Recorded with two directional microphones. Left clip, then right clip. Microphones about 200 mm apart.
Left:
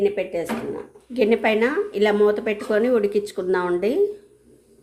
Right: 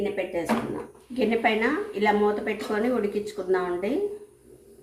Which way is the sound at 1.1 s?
60° left (ahead or behind).